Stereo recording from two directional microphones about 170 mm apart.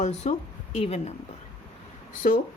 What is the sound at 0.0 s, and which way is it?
Speech, 40° left (ahead or behind).